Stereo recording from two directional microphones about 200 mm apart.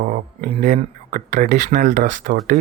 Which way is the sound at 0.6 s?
40° right (ahead or behind).